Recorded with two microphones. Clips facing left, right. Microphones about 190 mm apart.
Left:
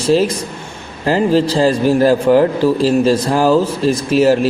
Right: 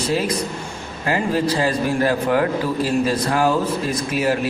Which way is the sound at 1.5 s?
30° left (ahead or behind).